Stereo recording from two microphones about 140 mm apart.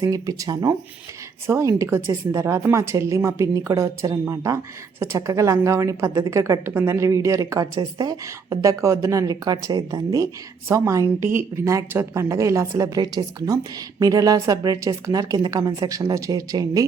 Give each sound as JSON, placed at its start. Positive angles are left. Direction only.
{"t": 0.0, "sound": "a woman's voice", "side_deg": -25}